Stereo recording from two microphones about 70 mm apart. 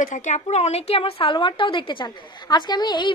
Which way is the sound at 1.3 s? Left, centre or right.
Left.